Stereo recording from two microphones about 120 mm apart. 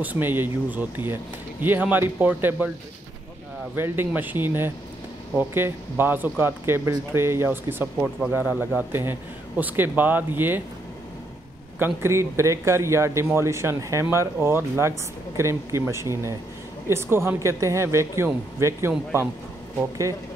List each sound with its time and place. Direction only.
0.0 s speech: 15° right (ahead or behind)
3.7 s speech: 20° right (ahead or behind)
11.8 s speech: 20° right (ahead or behind)